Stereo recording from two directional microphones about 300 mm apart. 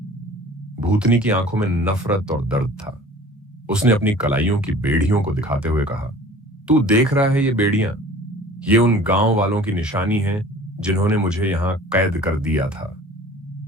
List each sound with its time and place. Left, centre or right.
0.8 s speech: centre